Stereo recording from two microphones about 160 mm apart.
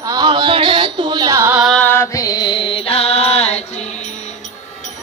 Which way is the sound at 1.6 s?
5° left (ahead or behind).